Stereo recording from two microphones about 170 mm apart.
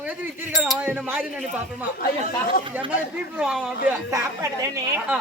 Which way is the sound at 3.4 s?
5° right (ahead or behind).